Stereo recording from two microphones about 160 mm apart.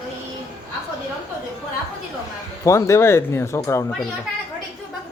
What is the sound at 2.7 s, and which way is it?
Speech, 15° left (ahead or behind).